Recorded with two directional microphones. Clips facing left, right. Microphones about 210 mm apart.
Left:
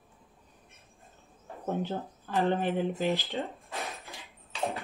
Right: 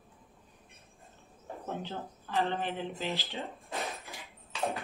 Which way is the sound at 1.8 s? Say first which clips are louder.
Left 6 dB; 50° left (ahead or behind).